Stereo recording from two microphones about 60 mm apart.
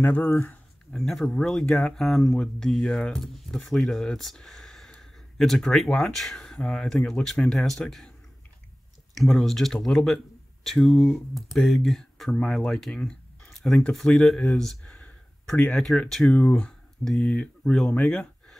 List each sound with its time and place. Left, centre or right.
0.0 s speech: left
0.9 s speech: centre
2.0 s speech: centre
3.5 s speech: centre
9.1 s speech: centre
14.8 s a sound: centre
15.7 s speech: centre
16.3 s speech: left
17.0 s speech: centre
18.0 s a sound: centre